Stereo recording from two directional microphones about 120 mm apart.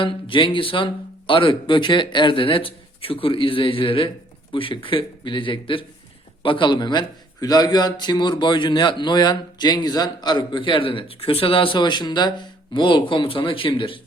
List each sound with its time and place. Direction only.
0.0 s a man's voice: 45° left (ahead or behind)